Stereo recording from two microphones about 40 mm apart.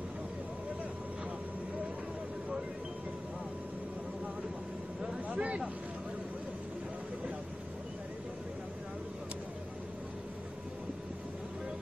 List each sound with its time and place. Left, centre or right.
5.3 s vehicle: right